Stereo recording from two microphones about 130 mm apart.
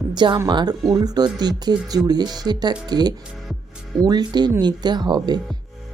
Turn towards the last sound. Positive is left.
turn(degrees=-35)  # may be behind; listen again after turning